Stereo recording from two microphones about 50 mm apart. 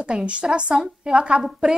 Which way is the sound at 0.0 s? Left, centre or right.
Right.